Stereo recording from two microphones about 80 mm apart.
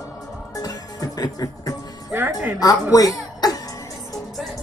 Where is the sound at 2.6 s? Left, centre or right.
Left.